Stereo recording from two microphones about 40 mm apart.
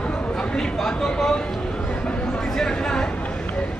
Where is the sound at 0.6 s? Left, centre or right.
Centre.